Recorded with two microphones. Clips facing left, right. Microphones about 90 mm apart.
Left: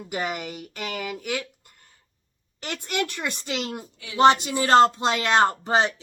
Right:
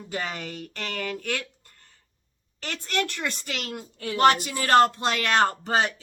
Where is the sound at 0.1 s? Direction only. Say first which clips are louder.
Left 3 dB; 15° left (ahead or behind).